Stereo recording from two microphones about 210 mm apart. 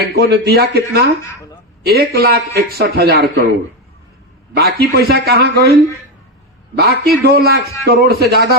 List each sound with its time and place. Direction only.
0.0 s a man's voice: 50° right (ahead or behind)
4.5 s a man's voice: 50° right (ahead or behind)
6.7 s a man's voice: 50° right (ahead or behind)